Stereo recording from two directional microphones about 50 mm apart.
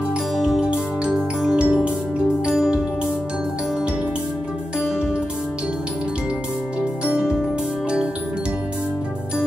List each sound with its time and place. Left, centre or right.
0.4 s music: centre
7.1 s music: centre